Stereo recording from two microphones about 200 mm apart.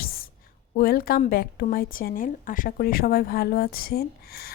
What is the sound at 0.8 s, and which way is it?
Speech, 45° left (ahead or behind).